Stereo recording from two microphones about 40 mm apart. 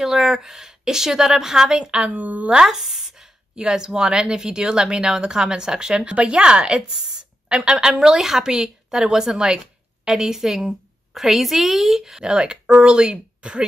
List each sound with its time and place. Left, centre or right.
0.0 s a woman's voice: centre
2.0 s speech: right
2.6 s a woman's voice: centre; by 13.7 s right